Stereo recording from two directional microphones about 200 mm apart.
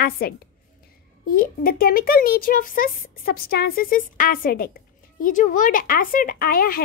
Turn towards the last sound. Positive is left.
turn(degrees=45)  # may be behind; listen again after turning